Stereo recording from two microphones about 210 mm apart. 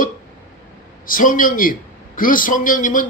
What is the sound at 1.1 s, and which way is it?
A man's voice, 40° left (ahead or behind).